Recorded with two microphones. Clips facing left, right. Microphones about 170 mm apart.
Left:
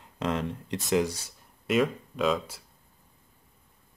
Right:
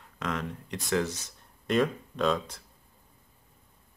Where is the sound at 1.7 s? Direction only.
5° left (ahead or behind).